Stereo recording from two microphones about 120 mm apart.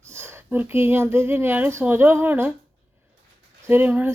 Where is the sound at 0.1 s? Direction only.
20° right (ahead or behind).